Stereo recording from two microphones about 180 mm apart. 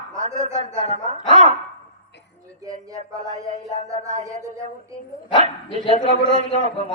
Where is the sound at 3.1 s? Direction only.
20° right (ahead or behind).